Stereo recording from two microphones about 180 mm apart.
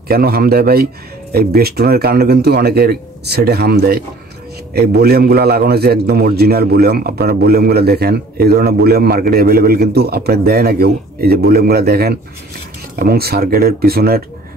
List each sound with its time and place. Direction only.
0.1 s a man's voice: 55° right (ahead or behind)